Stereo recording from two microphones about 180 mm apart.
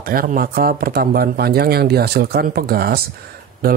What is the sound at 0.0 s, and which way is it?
Speech, 55° right (ahead or behind).